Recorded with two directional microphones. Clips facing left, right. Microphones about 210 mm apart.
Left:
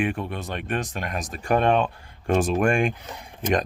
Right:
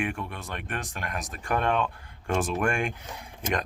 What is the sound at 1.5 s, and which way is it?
Speech, 30° left (ahead or behind).